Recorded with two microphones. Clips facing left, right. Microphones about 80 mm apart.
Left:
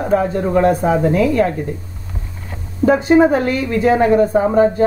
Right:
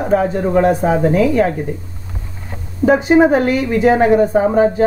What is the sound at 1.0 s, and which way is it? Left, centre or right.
Speech, centre.